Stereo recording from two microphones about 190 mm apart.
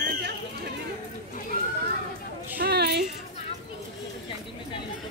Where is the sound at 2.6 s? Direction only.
60° right (ahead or behind).